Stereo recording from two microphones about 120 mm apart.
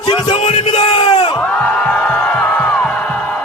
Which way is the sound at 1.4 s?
10° left (ahead or behind).